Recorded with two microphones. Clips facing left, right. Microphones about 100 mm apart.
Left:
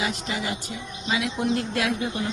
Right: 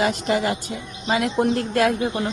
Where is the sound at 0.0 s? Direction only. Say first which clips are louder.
Right 8 dB; 50° right (ahead or behind).